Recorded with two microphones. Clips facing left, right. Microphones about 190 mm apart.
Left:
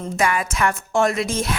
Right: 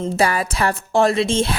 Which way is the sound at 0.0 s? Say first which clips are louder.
Right 3 dB; 35° right (ahead or behind).